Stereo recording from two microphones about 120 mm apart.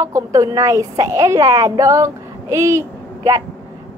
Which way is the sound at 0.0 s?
25° right (ahead or behind).